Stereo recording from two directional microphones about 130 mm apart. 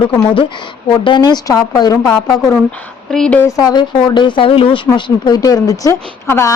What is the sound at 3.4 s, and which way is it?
Speech, 25° left (ahead or behind).